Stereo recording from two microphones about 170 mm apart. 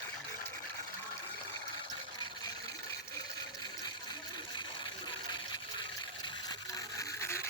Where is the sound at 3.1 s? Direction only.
20° left (ahead or behind).